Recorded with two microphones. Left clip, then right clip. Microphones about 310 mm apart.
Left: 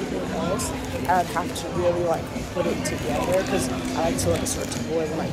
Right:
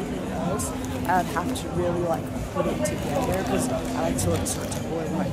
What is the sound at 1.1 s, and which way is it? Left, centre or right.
Speech, centre.